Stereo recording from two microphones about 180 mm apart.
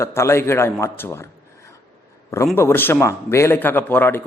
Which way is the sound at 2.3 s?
15° left (ahead or behind).